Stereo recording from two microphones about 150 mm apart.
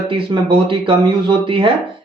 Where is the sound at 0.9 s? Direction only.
35° right (ahead or behind).